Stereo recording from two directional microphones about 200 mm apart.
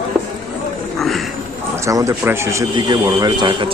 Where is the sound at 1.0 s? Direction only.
Centre (ahead or behind).